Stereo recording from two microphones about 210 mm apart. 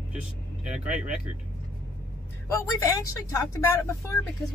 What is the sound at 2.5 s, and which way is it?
Speech, 15° left (ahead or behind).